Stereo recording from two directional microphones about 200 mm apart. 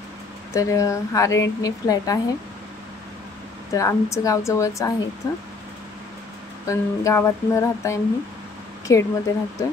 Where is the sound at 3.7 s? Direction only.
15° left (ahead or behind).